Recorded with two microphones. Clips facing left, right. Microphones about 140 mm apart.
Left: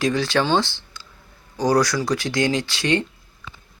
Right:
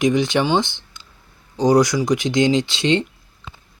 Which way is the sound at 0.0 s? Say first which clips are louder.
Right 3 dB; 20° right (ahead or behind).